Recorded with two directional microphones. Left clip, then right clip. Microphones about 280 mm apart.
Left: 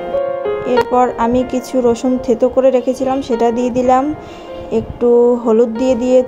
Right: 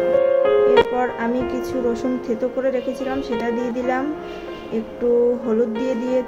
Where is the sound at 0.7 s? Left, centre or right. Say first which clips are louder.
Left 4 dB; left.